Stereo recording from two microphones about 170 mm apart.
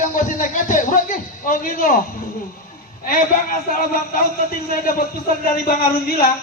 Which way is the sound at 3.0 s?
55° left (ahead or behind).